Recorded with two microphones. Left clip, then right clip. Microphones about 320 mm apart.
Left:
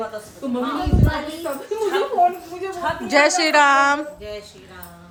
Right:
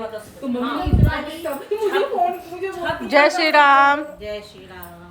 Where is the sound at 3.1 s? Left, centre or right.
Centre.